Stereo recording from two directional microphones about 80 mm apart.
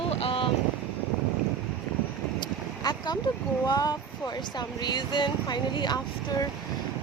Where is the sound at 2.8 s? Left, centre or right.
Left.